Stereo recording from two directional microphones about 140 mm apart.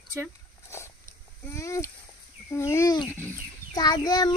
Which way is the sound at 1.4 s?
20° left (ahead or behind).